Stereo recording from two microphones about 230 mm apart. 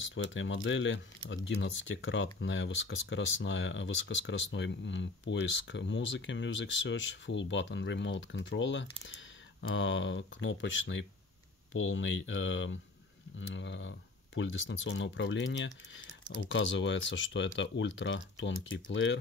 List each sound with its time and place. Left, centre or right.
0.0 s speech: left